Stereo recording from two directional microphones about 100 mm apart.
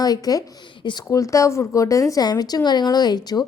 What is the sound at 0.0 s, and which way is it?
Speech, 40° left (ahead or behind).